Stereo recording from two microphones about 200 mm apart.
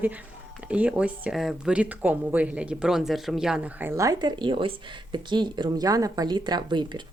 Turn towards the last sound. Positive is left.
turn(degrees=-20)  # may be behind; listen again after turning